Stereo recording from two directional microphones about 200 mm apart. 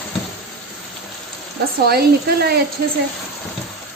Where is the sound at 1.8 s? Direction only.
50° right (ahead or behind).